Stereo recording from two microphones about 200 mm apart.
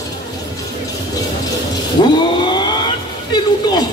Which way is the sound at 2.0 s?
25° left (ahead or behind).